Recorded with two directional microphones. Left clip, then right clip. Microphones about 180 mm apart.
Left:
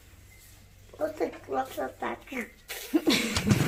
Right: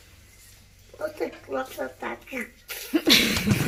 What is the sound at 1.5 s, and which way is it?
Speech, 15° left (ahead or behind).